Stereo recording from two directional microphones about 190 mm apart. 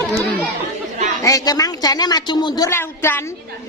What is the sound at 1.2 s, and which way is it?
Speech, 20° left (ahead or behind).